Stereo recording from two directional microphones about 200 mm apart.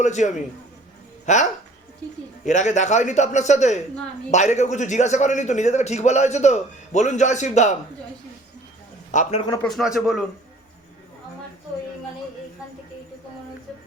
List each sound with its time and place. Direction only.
0.0 s a man's voice: 35° left (ahead or behind)
2.5 s a man's voice: 35° left (ahead or behind)
9.1 s a man's voice: 40° left (ahead or behind)
9.6 s speech: centre (ahead or behind)